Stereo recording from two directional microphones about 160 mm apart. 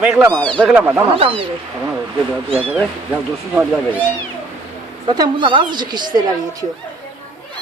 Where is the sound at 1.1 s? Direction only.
35° right (ahead or behind).